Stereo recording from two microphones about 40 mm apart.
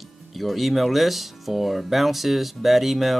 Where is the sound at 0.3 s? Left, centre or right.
Centre.